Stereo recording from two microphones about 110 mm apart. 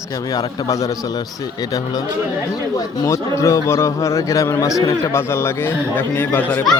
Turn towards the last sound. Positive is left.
turn(degrees=20)  # may be behind; listen again after turning